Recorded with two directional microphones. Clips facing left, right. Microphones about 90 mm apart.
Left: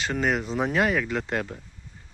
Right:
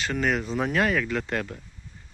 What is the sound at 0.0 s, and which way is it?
Speech, 25° left (ahead or behind).